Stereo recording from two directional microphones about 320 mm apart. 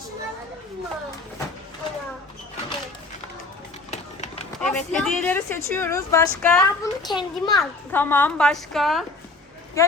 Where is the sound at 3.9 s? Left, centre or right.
Left.